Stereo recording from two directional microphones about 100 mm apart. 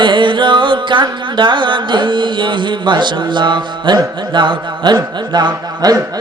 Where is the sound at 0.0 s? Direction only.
55° right (ahead or behind).